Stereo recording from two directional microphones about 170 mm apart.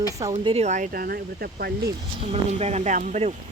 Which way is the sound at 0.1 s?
20° right (ahead or behind).